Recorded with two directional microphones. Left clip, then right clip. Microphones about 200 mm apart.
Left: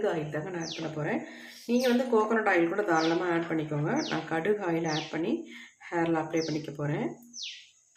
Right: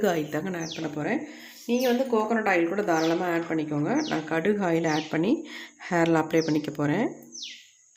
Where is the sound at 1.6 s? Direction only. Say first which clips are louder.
Right 2 dB; 25° right (ahead or behind); by 7.1 s 50° right (ahead or behind).